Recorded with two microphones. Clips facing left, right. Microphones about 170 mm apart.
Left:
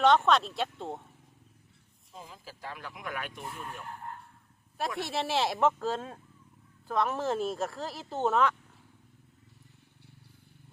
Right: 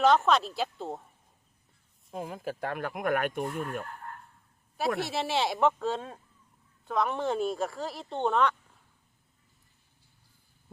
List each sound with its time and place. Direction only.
0.0 s speech: centre (ahead or behind)
2.0 s speech: 60° right (ahead or behind)
4.9 s speech: centre (ahead or behind)